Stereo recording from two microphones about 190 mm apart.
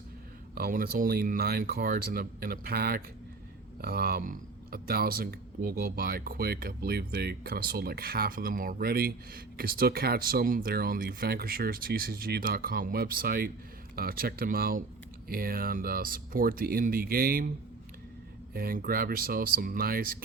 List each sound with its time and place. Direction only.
0.5 s speech: 50° right (ahead or behind)
18.5 s speech: 50° right (ahead or behind)